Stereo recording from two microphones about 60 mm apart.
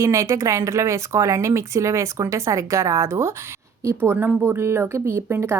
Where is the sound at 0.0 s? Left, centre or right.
Right.